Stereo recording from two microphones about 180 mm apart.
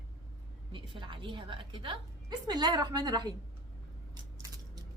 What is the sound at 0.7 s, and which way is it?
A woman's voice, 25° right (ahead or behind).